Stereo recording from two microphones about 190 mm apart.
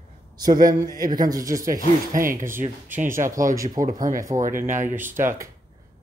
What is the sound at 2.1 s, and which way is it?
Speech, 45° right (ahead or behind).